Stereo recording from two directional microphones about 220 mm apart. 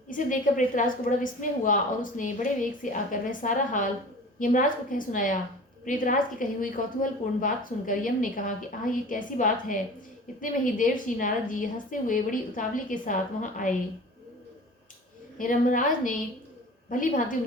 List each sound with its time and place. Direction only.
0.1 s a woman's voice: 35° left (ahead or behind)
15.4 s a woman's voice: 35° left (ahead or behind)